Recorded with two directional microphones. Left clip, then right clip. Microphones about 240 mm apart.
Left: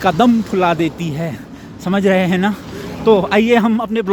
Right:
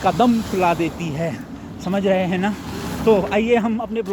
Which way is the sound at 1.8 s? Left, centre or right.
Left.